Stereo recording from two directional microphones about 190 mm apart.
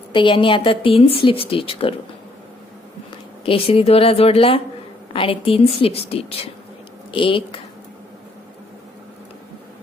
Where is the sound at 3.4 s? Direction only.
30° left (ahead or behind).